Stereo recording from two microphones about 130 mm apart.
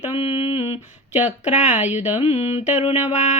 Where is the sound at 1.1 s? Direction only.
65° left (ahead or behind).